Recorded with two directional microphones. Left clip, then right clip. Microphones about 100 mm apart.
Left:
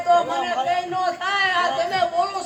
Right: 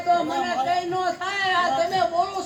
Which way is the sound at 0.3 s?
25° left (ahead or behind).